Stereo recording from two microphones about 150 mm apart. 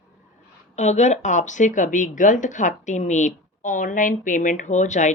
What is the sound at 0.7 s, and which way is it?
Speech, 50° left (ahead or behind).